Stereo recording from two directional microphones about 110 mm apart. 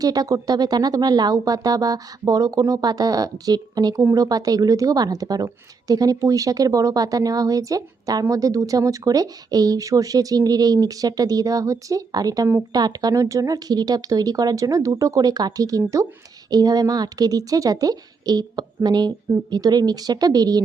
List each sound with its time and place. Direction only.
0.0 s speech: 35° right (ahead or behind)